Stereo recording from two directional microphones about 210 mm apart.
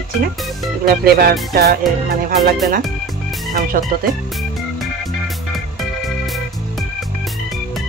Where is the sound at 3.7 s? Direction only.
40° right (ahead or behind).